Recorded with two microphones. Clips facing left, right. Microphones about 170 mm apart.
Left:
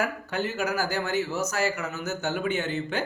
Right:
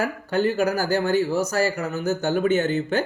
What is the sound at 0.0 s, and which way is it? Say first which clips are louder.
Speech: right 6 dB; 35° right (ahead or behind).